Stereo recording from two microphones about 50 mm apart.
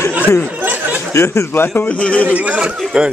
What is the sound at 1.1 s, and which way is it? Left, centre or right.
Speech, left.